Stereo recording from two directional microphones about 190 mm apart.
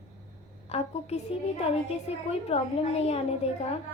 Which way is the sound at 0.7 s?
35° left (ahead or behind).